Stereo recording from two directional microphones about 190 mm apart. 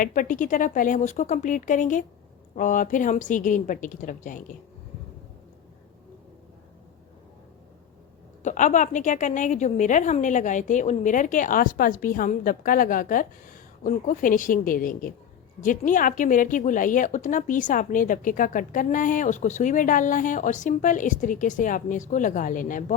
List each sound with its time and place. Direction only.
0.0 s a woman's voice: 45° left (ahead or behind)
8.4 s a woman's voice: 40° left (ahead or behind)